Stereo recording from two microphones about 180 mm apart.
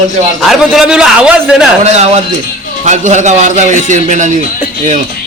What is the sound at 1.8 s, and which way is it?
A man's voice, 40° right (ahead or behind).